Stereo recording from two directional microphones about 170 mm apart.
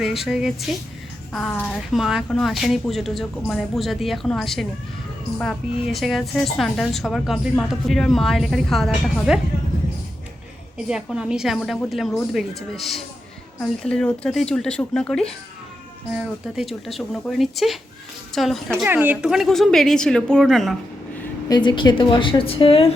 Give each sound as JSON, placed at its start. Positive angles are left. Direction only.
{"t": 0.0, "sound": "a woman's voice", "side_deg": 0}
{"t": 10.8, "sound": "a woman's voice", "side_deg": -5}
{"t": 21.5, "sound": "a woman's voice", "side_deg": 25}